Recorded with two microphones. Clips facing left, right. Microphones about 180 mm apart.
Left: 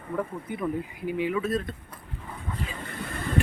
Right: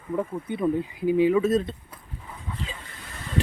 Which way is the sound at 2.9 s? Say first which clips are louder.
Left 9 dB; 55° left (ahead or behind).